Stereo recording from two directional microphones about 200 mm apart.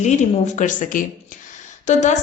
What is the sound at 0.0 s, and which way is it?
Speech, 35° left (ahead or behind).